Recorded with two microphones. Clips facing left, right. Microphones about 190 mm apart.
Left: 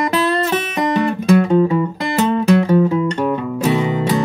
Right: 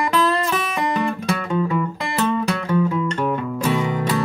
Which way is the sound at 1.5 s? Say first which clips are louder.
Left 7 dB; 35° left (ahead or behind).